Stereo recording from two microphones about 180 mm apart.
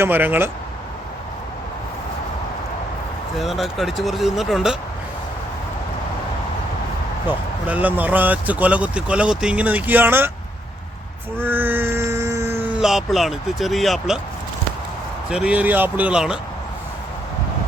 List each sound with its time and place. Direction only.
0.0 s speech: 10° right (ahead or behind)
3.3 s speech: centre (ahead or behind)
7.3 s speech: 10° right (ahead or behind)
11.3 s a sound: 10° right (ahead or behind)
12.8 s speech: centre (ahead or behind)
15.3 s speech: 5° right (ahead or behind)